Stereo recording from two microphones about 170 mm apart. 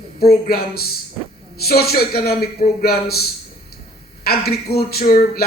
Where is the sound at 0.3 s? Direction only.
65° left (ahead or behind).